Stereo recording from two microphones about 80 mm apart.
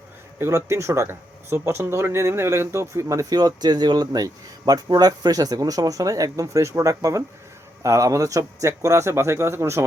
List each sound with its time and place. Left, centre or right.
0.3 s a man's voice: right